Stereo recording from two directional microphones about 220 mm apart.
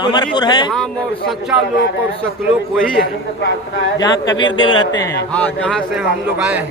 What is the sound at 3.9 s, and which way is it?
A man's voice, 15° left (ahead or behind).